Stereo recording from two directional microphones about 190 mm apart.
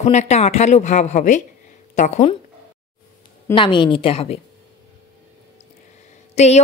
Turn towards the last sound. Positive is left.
turn(degrees=35)  # may be behind; listen again after turning